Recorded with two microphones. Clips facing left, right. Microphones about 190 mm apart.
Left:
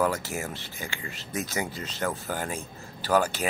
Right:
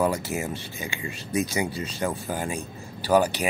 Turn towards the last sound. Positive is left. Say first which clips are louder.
# right 3 dB
turn(degrees=-15)  # may be behind; listen again after turning